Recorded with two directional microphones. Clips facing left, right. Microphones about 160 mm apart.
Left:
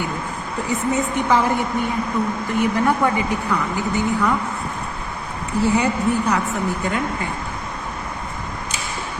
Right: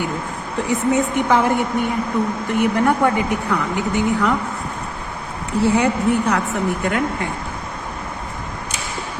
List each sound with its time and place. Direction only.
0.7 s speech: 65° right (ahead or behind)
5.5 s a woman's voice: 70° right (ahead or behind)